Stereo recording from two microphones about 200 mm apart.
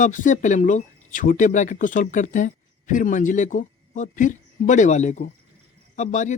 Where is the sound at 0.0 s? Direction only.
40° left (ahead or behind).